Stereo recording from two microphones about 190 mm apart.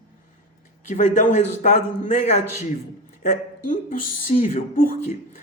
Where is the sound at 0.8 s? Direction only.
40° left (ahead or behind).